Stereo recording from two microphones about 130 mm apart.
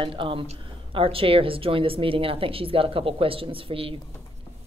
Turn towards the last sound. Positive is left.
turn(degrees=-45)  # may be behind; listen again after turning